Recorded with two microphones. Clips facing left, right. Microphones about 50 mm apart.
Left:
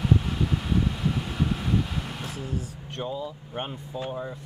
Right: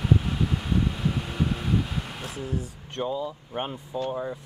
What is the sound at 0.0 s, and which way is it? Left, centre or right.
Vehicle, centre.